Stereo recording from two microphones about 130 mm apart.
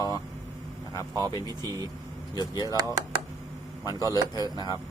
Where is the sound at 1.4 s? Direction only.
30° right (ahead or behind).